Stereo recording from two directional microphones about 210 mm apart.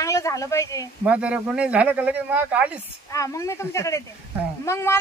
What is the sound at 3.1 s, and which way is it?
Speech, 15° left (ahead or behind).